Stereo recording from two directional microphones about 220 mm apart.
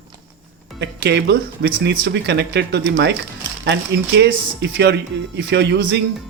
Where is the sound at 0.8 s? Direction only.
50° right (ahead or behind).